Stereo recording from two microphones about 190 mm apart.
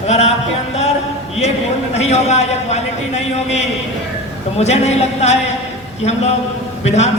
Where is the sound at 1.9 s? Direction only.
35° left (ahead or behind).